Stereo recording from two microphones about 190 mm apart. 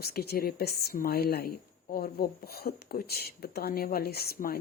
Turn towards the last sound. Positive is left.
turn(degrees=55)  # may be behind; listen again after turning